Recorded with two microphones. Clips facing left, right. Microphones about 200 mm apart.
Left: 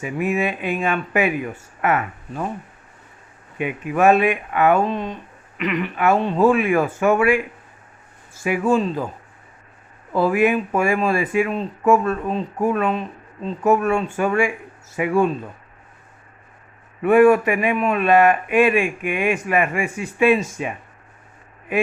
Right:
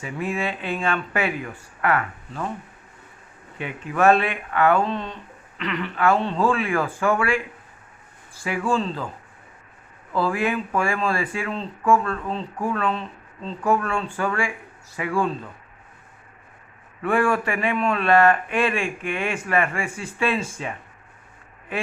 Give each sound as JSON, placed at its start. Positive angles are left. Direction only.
{"t": 0.0, "sound": "speech", "side_deg": 20}
{"t": 3.6, "sound": "speech", "side_deg": 15}
{"t": 8.4, "sound": "speech", "side_deg": 20}
{"t": 10.1, "sound": "speech", "side_deg": 20}
{"t": 17.0, "sound": "speech", "side_deg": 20}